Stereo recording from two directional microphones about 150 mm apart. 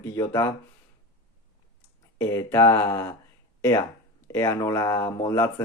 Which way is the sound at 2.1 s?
20° left (ahead or behind).